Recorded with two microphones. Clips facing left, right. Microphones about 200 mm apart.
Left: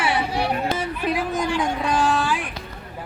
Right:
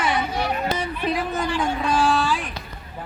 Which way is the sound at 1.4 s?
10° left (ahead or behind).